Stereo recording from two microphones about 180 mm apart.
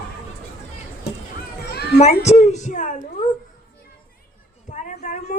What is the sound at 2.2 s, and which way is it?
Speech, 40° left (ahead or behind).